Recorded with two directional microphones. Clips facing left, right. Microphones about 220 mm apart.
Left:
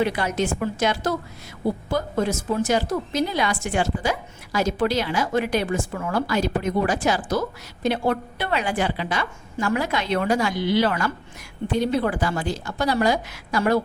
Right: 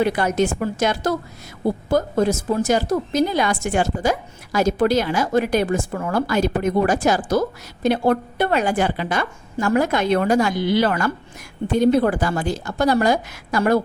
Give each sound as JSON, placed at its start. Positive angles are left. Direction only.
{"t": 0.0, "sound": "a woman's voice", "side_deg": -45}